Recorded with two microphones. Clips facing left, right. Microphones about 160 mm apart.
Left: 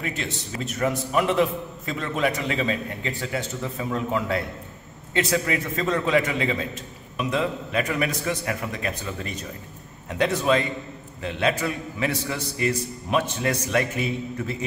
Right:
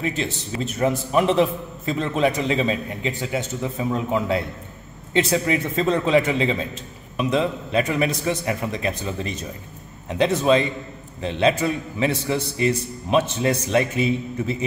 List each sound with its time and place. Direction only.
0.0 s a man's voice: 20° right (ahead or behind)